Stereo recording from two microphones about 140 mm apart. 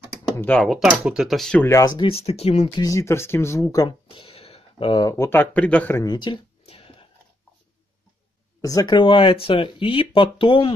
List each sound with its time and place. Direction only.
0.4 s a man's voice: 10° left (ahead or behind)
1.6 s speech: 20° left (ahead or behind)
1.9 s speech: 35° left (ahead or behind)
2.8 s speech: 25° left (ahead or behind)
4.1 s a sound: 40° left (ahead or behind)
5.1 s a man's voice: 15° left (ahead or behind)
5.9 s speech: 30° left (ahead or behind)
6.6 s whispering: 45° left (ahead or behind)
8.5 s speech: 25° left (ahead or behind)